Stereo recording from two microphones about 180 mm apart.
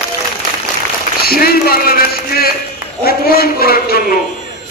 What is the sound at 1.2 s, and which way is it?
A man's voice, 55° left (ahead or behind).